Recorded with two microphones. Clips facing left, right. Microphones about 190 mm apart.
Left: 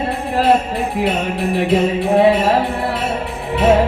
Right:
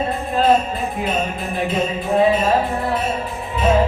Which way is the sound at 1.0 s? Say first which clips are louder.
Left 5 dB; 75° left (ahead or behind).